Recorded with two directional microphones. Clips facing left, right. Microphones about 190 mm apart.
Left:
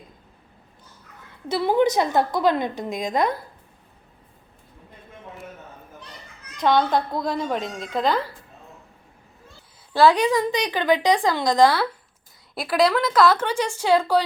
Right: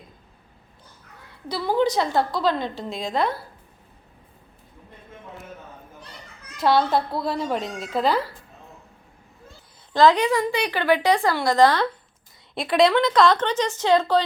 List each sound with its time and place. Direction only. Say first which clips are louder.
1.5 s a woman's voice: left 2 dB; 25° left (ahead or behind)
6.6 s a woman's voice: even; 5° right (ahead or behind)
9.9 s a woman's voice: even; 10° left (ahead or behind)